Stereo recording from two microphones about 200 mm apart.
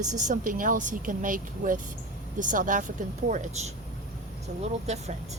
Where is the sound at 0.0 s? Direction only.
40° right (ahead or behind).